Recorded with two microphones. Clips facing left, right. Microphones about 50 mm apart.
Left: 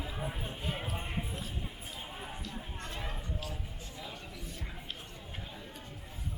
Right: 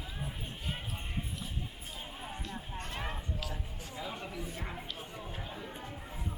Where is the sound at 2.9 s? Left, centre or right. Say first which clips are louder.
Right 3 dB; right.